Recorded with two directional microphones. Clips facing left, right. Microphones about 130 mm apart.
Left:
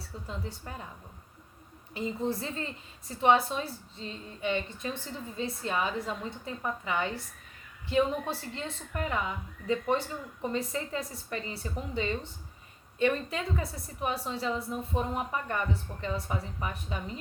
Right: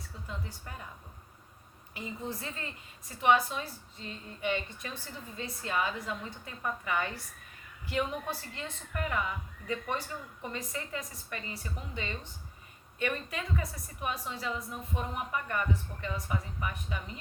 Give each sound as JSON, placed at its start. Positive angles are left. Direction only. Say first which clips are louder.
{"t": 0.3, "sound": "a woman's voice", "louder": "left 3 dB", "side_deg": 25}
{"t": 2.0, "sound": "a woman's voice", "louder": "left 7 dB", "side_deg": 30}